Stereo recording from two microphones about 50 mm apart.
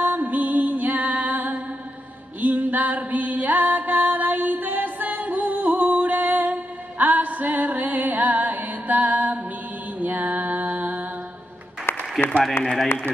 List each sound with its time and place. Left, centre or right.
0.0 s music: right
11.9 s a sound: left
12.6 s a man's voice: left